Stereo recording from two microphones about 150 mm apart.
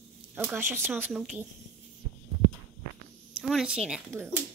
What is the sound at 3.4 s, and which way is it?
Speech, 5° right (ahead or behind).